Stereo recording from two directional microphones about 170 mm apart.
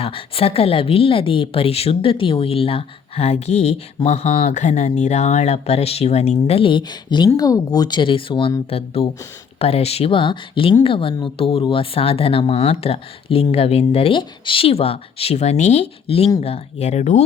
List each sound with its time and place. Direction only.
0.0 s a woman's voice: 35° left (ahead or behind)